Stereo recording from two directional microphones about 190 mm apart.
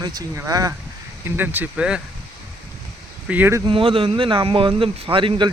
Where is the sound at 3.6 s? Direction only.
25° right (ahead or behind).